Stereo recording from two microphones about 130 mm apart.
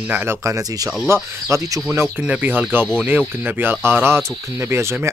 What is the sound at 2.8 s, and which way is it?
Speech, 5° left (ahead or behind).